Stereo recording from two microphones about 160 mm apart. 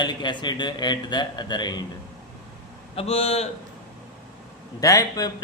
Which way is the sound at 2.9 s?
40° left (ahead or behind).